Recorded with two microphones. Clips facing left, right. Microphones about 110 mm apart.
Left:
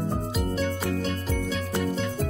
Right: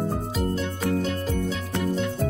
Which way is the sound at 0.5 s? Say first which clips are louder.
Right 1 dB; centre (ahead or behind).